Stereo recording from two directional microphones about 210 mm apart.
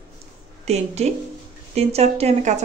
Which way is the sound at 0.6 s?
30° right (ahead or behind).